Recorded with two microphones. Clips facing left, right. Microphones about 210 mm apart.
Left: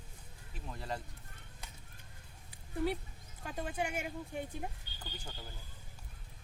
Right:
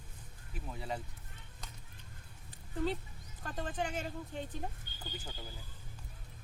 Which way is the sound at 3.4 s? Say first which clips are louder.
Even; 10° left (ahead or behind).